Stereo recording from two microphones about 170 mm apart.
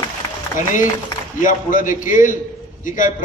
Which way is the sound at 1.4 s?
50° left (ahead or behind).